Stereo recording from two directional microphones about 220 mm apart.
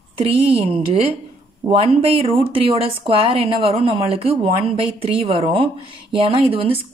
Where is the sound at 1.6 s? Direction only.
20° right (ahead or behind).